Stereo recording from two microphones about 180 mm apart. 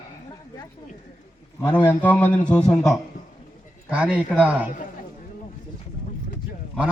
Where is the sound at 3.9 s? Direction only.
10° right (ahead or behind).